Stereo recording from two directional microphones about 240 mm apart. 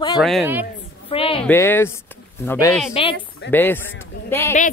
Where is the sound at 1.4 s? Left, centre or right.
Centre.